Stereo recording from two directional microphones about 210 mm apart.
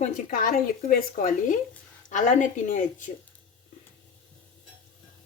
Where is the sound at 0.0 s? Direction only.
40° left (ahead or behind).